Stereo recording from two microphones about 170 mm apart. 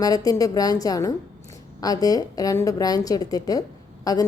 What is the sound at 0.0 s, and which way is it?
A woman's voice, 20° left (ahead or behind).